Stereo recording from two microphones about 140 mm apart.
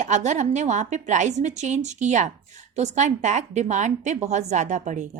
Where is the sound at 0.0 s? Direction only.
60° right (ahead or behind).